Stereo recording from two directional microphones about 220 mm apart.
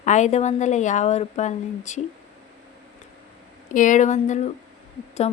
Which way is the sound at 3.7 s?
35° left (ahead or behind).